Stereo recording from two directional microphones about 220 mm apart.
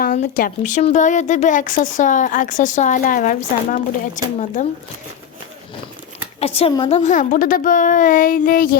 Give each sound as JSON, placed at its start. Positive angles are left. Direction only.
{"t": 0.0, "sound": "speech", "side_deg": 40}
{"t": 6.4, "sound": "speech", "side_deg": 25}